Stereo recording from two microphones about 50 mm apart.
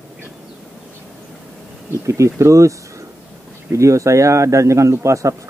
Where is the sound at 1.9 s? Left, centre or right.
Right.